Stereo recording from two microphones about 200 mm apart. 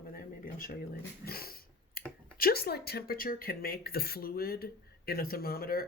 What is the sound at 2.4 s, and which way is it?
Speech, 50° left (ahead or behind).